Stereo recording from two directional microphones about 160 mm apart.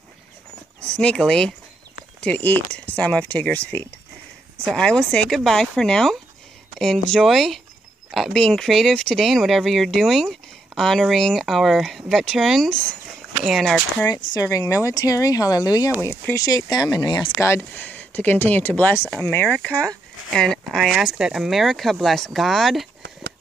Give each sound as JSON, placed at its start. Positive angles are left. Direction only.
{"t": 0.7, "sound": "speech", "side_deg": 5}
{"t": 14.3, "sound": "speech", "side_deg": 20}